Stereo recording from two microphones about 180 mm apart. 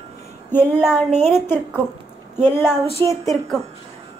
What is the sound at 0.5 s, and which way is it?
A woman's voice, 10° left (ahead or behind).